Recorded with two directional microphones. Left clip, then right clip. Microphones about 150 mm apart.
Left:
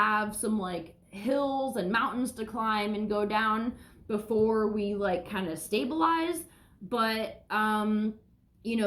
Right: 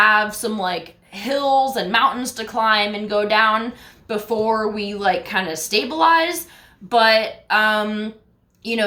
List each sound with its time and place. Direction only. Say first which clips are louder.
0.0 s speech: right 12 dB; 15° right (ahead or behind)